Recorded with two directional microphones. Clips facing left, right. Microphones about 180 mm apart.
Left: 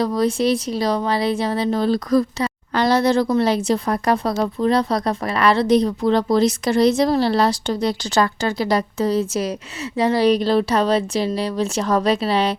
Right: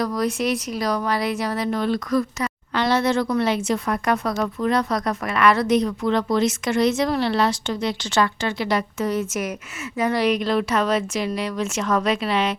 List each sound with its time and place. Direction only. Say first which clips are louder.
0.0 s speech: left 4 dB; 30° left (ahead or behind)